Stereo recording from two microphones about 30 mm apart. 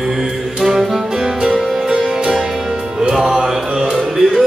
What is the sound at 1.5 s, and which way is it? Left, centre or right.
Music, centre.